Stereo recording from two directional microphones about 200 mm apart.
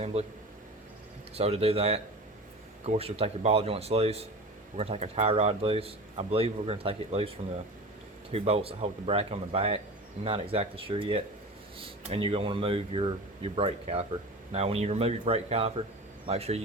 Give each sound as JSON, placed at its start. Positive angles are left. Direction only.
{"t": 0.0, "sound": "speech", "side_deg": -30}
{"t": 1.4, "sound": "a man's voice", "side_deg": -30}